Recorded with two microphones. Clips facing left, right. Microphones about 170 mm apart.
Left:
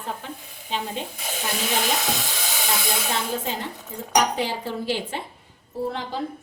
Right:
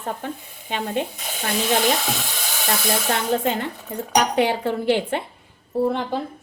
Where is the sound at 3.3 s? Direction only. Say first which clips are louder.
Right 6 dB; 70° right (ahead or behind).